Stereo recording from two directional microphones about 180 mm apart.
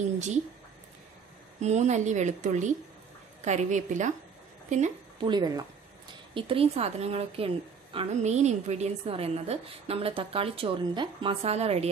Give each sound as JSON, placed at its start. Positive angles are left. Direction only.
{"t": 1.6, "sound": "a woman's voice", "side_deg": -40}
{"t": 5.2, "sound": "a woman's voice", "side_deg": -25}